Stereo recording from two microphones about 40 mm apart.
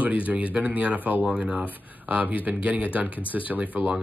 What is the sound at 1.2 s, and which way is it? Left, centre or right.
Speech, right.